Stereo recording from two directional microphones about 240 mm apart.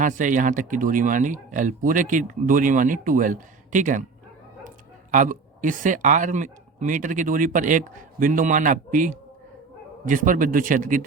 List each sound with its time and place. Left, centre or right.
0.0 s speech: right
5.1 s speech: right